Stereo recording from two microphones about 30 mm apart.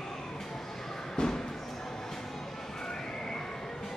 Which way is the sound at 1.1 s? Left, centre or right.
Centre.